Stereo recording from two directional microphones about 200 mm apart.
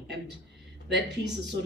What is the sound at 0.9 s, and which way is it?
Speech, 60° right (ahead or behind).